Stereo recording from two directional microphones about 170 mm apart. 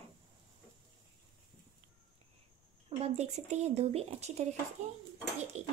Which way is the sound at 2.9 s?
35° right (ahead or behind).